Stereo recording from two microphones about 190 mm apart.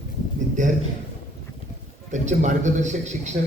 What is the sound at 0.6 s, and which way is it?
Speech, 40° right (ahead or behind).